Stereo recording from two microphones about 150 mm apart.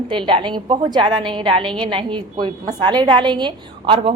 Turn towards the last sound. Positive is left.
turn(degrees=-35)  # may be behind; listen again after turning